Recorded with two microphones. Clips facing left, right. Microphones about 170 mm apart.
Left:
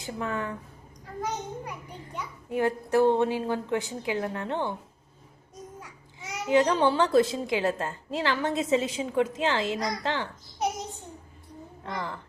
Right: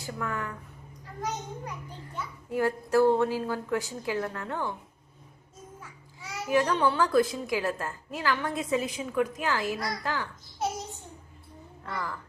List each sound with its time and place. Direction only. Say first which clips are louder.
0.0 s a child's voice: left 2 dB; 20° left (ahead or behind)
1.2 s a child's voice: left 2 dB; 10° left (ahead or behind)
5.8 s babbling: left 2 dB; 20° left (ahead or behind)
6.7 s a child's voice: left 2 dB; 30° left (ahead or behind)